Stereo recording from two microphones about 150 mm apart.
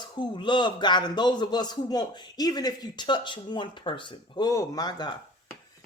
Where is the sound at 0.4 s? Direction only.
30° left (ahead or behind).